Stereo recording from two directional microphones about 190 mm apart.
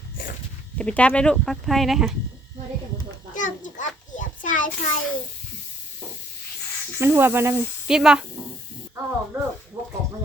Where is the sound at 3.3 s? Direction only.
40° left (ahead or behind).